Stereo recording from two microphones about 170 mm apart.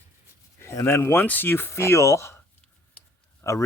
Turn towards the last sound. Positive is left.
turn(degrees=15)  # may be behind; listen again after turning